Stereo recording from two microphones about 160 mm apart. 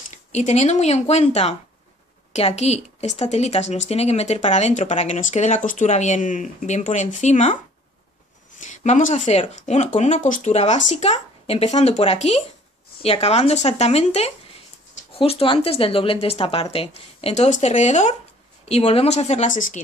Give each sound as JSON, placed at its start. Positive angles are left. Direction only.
{"t": 0.1, "sound": "speech", "side_deg": 45}
{"t": 8.5, "sound": "speech", "side_deg": 50}